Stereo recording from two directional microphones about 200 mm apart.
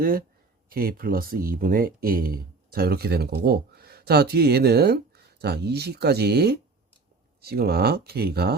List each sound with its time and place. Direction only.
0.0 s speech: 45° right (ahead or behind)